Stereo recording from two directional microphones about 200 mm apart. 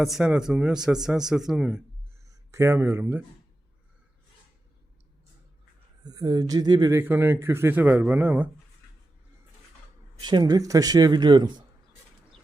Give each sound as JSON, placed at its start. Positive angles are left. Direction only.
{"t": 0.0, "sound": "speech", "side_deg": 0}
{"t": 2.3, "sound": "speech", "side_deg": -15}
{"t": 6.0, "sound": "speech", "side_deg": -20}
{"t": 10.2, "sound": "speech", "side_deg": -20}